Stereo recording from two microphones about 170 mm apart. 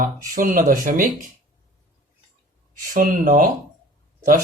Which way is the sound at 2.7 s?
55° right (ahead or behind).